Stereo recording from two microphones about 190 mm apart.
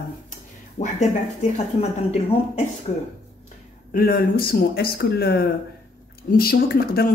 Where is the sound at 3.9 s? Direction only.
50° left (ahead or behind).